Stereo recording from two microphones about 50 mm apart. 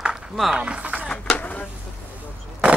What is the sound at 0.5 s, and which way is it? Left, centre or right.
Speech, right.